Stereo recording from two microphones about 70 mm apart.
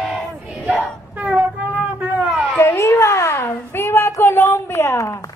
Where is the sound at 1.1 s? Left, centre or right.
Right.